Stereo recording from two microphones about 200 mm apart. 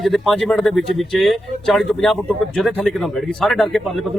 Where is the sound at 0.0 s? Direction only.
Centre (ahead or behind).